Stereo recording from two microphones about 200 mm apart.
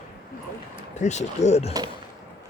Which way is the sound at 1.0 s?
35° left (ahead or behind).